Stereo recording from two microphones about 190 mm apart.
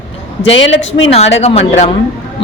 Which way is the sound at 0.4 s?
75° left (ahead or behind).